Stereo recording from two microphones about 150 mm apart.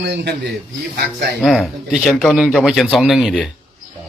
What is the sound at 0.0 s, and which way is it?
Speech, 90° right.